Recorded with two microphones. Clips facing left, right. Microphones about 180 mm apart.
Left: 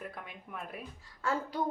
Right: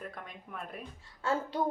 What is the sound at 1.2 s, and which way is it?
Speech, 25° right (ahead or behind).